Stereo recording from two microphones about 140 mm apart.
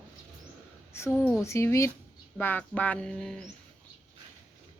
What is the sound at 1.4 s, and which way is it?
A woman's voice, 20° left (ahead or behind).